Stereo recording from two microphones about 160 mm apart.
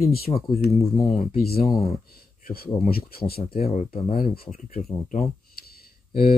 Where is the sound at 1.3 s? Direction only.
75° left (ahead or behind).